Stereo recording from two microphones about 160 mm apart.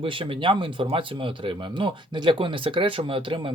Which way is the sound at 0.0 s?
35° right (ahead or behind).